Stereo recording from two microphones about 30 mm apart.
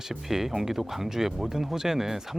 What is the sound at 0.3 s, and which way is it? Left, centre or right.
Speech, centre.